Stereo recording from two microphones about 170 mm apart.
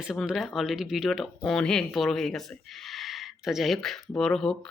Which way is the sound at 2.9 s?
Centre (ahead or behind).